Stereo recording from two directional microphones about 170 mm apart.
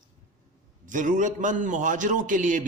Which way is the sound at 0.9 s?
50° right (ahead or behind).